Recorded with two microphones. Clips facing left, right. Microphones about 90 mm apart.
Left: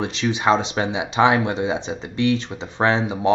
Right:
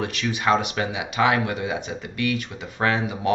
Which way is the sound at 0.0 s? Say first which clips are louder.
Left 3 dB; 20° left (ahead or behind).